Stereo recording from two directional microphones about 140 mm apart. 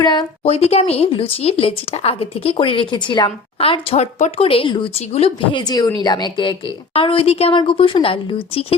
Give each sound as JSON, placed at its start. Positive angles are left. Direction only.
{"t": 0.0, "sound": "a woman's voice", "side_deg": 30}
{"t": 0.4, "sound": "speech", "side_deg": 45}
{"t": 3.6, "sound": "a woman's voice", "side_deg": 40}
{"t": 5.5, "sound": "a woman's voice", "side_deg": 30}